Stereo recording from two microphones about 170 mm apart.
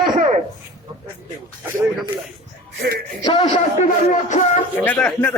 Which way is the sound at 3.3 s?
40° left (ahead or behind).